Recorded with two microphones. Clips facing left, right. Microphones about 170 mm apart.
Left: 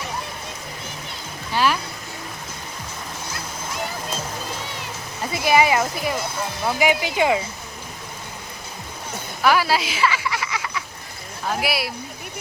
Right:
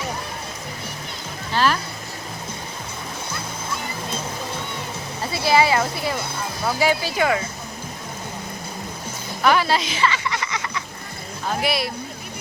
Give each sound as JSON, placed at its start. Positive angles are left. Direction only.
{"t": 1.5, "sound": "speech", "side_deg": 10}
{"t": 5.3, "sound": "speech", "side_deg": 15}
{"t": 9.4, "sound": "a sound", "side_deg": 5}
{"t": 11.6, "sound": "speech", "side_deg": 5}